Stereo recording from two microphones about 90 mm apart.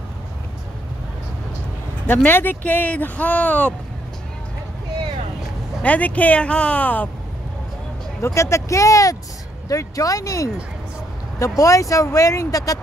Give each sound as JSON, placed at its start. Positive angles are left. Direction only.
{"t": 2.0, "sound": "speech", "side_deg": 20}
{"t": 5.8, "sound": "speech", "side_deg": 15}
{"t": 8.2, "sound": "speech", "side_deg": 30}